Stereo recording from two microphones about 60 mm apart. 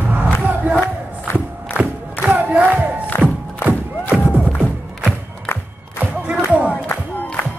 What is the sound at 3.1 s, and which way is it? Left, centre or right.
Music, left.